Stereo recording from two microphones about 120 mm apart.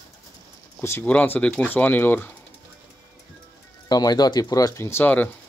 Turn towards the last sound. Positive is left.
turn(degrees=15)  # may be behind; listen again after turning